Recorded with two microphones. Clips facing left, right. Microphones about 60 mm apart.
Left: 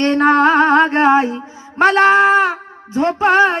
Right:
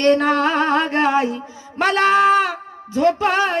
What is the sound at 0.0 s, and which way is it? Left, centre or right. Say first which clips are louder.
Music: left 3 dB; left.